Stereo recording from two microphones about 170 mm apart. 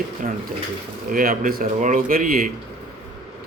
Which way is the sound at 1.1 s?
55° right (ahead or behind).